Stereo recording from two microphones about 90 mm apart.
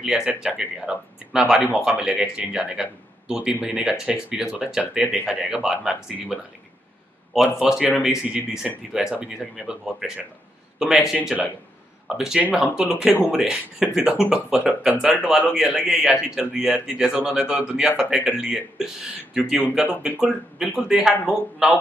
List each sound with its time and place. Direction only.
0.0 s speech: 10° right (ahead or behind)
7.5 s speech: 5° right (ahead or behind)
12.4 s speech: 15° right (ahead or behind)